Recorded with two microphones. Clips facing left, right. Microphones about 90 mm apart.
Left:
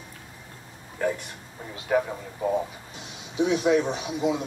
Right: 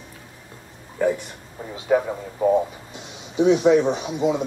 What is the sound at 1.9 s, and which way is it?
Speech, 10° right (ahead or behind).